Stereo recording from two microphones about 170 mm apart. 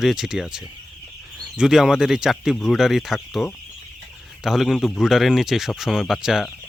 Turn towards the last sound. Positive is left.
turn(degrees=0)  # may be behind; listen again after turning